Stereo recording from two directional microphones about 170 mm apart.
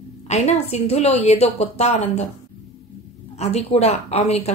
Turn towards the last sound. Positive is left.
turn(degrees=40)  # may be behind; listen again after turning